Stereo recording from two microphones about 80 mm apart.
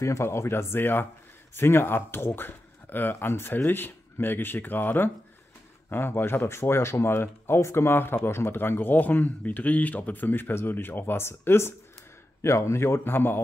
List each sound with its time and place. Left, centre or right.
0.0 s speech: left